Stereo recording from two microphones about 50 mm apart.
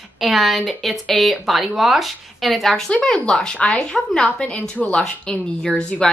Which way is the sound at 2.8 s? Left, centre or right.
Centre.